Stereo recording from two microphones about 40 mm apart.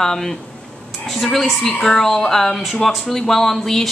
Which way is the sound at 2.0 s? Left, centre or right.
Centre.